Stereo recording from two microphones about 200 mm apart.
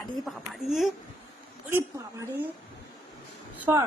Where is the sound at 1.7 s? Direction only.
10° right (ahead or behind).